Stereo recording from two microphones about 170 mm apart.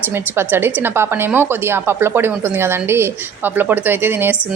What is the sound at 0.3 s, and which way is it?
A woman's voice, 15° right (ahead or behind).